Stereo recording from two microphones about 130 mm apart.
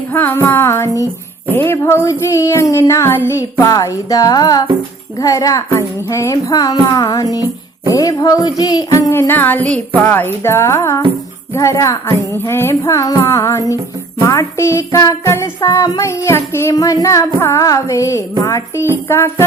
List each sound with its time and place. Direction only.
0.1 s music: 15° left (ahead or behind)